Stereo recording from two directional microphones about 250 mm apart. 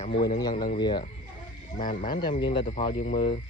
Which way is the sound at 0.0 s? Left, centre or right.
Left.